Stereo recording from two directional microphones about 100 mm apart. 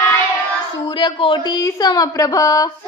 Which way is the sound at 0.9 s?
55° left (ahead or behind).